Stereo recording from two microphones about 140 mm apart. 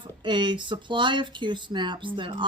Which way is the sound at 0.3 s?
35° right (ahead or behind).